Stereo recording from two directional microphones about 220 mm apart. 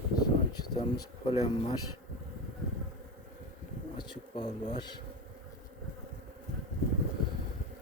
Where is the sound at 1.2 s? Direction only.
25° left (ahead or behind).